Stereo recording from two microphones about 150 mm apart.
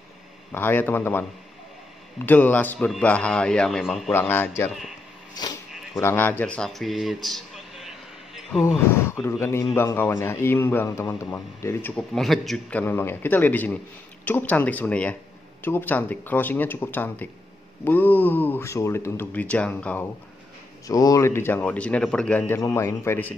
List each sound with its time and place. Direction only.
0.5 s a man's voice: 15° left (ahead or behind)
2.2 s a man's voice: 10° left (ahead or behind)
4.1 s a man's voice: 15° left (ahead or behind)
5.4 s a sound: 25° left (ahead or behind)
5.9 s a man's voice: 15° left (ahead or behind); by 7.9 s centre (ahead or behind)
8.6 s a man's voice: 15° left (ahead or behind)
20.8 s a man's voice: 25° left (ahead or behind)
22.6 s a man's voice: 20° left (ahead or behind)